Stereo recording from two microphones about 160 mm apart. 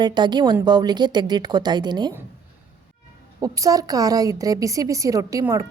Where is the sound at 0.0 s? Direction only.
25° right (ahead or behind).